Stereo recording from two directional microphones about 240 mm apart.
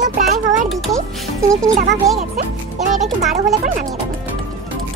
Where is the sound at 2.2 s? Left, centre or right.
Right.